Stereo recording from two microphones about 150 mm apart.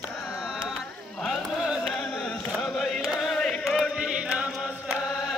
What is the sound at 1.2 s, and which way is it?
Carnatic music, centre (ahead or behind).